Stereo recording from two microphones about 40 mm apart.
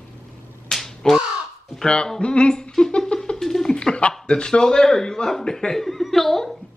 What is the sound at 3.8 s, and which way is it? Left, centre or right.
Speech, left.